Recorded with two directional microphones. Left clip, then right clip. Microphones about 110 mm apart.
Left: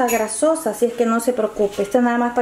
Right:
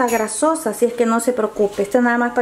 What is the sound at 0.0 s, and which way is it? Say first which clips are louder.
Speech: even; 15° right (ahead or behind).